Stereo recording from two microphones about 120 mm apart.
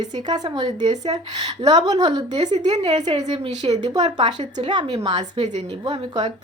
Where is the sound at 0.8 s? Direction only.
70° right (ahead or behind).